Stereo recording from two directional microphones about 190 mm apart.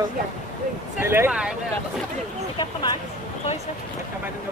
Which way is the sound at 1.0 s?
10° right (ahead or behind).